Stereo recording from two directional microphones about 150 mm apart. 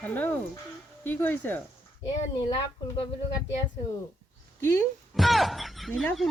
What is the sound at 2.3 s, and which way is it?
Speech, 25° left (ahead or behind).